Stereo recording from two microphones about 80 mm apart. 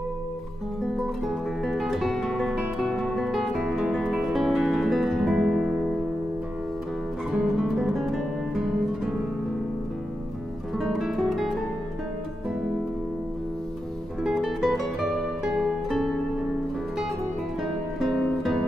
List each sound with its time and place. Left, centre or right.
0.9 s music: centre
7.2 s music: centre
10.8 s music: centre
14.2 s music: centre
18.0 s music: centre